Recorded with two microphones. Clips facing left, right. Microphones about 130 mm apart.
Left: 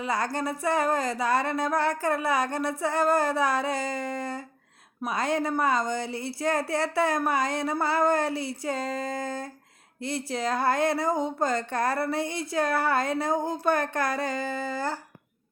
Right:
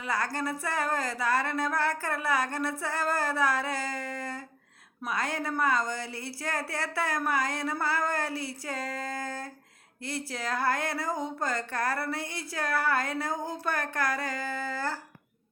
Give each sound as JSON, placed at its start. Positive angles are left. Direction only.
{"t": 0.0, "sound": "speech", "side_deg": 20}